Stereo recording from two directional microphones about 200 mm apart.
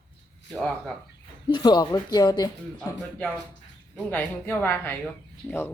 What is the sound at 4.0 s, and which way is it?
A woman's voice, 10° left (ahead or behind).